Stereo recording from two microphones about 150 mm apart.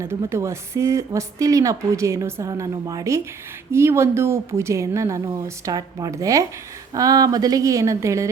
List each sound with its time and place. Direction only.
0.3 s speech: 20° right (ahead or behind)